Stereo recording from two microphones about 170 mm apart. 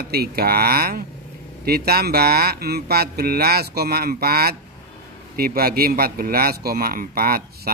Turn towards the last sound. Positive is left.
turn(degrees=-60)  # may be behind; listen again after turning